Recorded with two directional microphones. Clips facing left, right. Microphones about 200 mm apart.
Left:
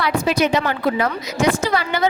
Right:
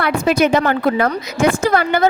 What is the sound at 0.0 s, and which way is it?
A woman's voice, 55° right (ahead or behind).